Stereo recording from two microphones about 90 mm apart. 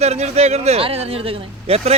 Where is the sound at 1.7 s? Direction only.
90° right.